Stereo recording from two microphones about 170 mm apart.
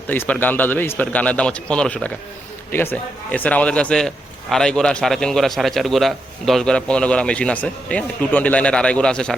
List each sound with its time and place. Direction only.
0.1 s a man's voice: 10° left (ahead or behind)